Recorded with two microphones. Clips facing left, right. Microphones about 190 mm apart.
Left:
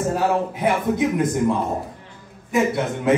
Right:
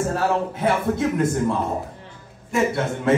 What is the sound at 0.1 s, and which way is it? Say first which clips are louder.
A man's voice: left 1 dB; 15° left (ahead or behind).